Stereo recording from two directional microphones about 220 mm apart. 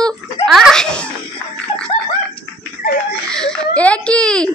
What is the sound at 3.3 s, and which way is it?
A child's voice, 5° left (ahead or behind).